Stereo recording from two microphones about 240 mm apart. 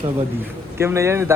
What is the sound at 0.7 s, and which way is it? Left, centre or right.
Speech, centre.